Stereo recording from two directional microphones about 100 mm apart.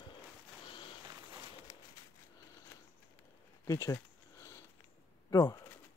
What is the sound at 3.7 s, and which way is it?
Speech, 30° left (ahead or behind).